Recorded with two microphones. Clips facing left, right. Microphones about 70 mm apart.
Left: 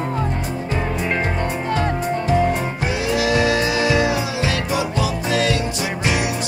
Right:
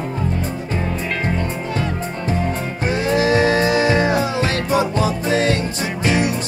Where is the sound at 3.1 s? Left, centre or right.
Right.